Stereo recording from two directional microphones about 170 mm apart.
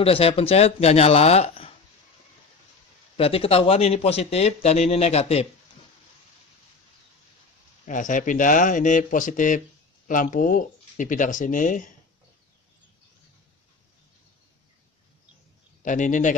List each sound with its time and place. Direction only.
0.0 s speech: 35° left (ahead or behind)
3.2 s speech: 35° left (ahead or behind)
7.8 s speech: 50° left (ahead or behind)
15.8 s speech: 50° left (ahead or behind)